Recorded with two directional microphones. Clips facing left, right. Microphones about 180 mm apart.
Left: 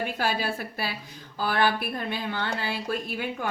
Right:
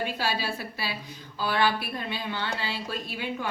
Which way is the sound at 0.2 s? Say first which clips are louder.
Left 2 dB; 50° left (ahead or behind).